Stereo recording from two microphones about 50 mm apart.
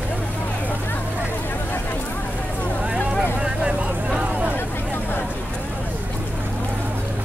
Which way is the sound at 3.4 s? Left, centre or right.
Centre.